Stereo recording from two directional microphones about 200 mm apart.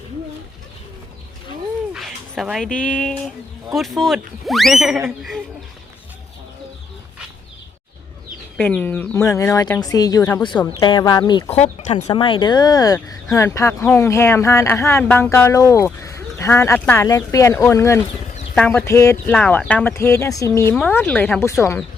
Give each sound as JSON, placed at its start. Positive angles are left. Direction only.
{"t": 1.9, "sound": "speech", "side_deg": 0}
{"t": 8.5, "sound": "speech", "side_deg": 5}
{"t": 11.5, "sound": "speech", "side_deg": 35}
{"t": 12.0, "sound": "speech", "side_deg": 25}